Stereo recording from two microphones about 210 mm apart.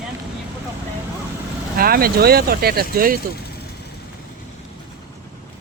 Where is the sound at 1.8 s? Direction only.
45° right (ahead or behind).